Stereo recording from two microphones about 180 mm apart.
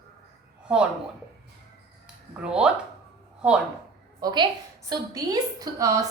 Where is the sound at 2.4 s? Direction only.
5° right (ahead or behind).